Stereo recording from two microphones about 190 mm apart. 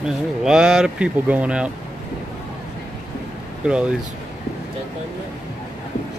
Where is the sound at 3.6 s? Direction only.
5° right (ahead or behind).